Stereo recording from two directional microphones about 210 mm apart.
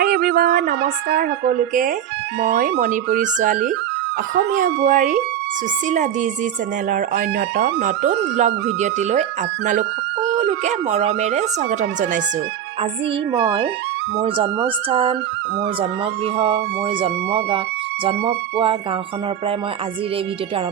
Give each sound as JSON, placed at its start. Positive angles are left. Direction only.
{"t": 0.0, "sound": "speech", "side_deg": -50}
{"t": 2.4, "sound": "speech", "side_deg": -50}
{"t": 2.7, "sound": "speech", "side_deg": -40}
{"t": 6.9, "sound": "speech", "side_deg": -40}
{"t": 10.3, "sound": "speech", "side_deg": -35}
{"t": 14.8, "sound": "speech", "side_deg": -25}